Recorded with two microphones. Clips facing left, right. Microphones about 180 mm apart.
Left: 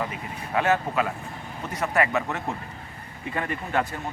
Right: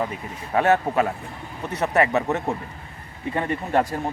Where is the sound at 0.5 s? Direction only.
40° right (ahead or behind).